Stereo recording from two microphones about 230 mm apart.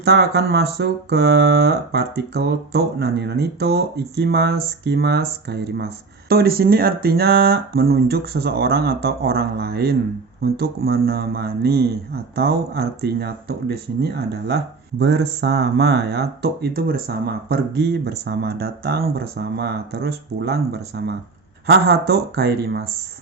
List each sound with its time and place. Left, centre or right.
0.0 s speech: right